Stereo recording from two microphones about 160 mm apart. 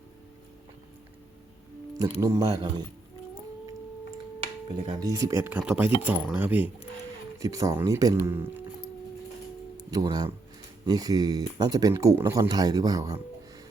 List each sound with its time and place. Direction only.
2.0 s speech: 20° right (ahead or behind)
4.9 s speech: 25° right (ahead or behind)
7.3 s speech: 20° right (ahead or behind)
9.9 s speech: 25° right (ahead or behind)